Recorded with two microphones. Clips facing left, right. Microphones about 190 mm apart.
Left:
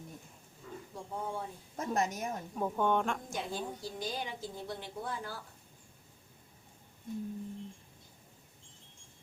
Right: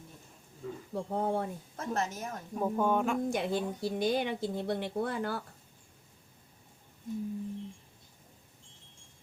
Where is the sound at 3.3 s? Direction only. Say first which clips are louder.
Right 7 dB; 65° right (ahead or behind).